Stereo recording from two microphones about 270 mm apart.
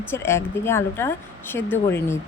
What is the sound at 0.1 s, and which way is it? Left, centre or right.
Speech, centre.